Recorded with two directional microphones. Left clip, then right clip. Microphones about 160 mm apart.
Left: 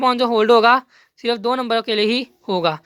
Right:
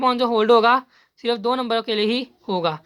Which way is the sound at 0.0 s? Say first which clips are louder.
Left 2 dB; 30° left (ahead or behind).